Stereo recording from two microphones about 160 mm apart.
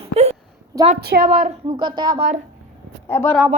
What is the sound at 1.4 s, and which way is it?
Child singing, 30° right (ahead or behind).